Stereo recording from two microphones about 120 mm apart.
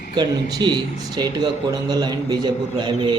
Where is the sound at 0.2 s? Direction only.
40° right (ahead or behind).